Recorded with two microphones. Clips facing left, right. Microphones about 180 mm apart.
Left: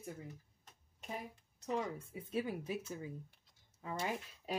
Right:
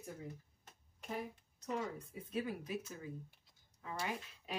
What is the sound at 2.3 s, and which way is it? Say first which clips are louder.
Speech: left 2 dB; 25° left (ahead or behind).